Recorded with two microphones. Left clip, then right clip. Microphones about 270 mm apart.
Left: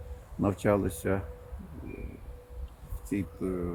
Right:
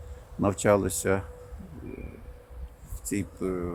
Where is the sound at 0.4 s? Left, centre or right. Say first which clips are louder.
Right 4 dB; right.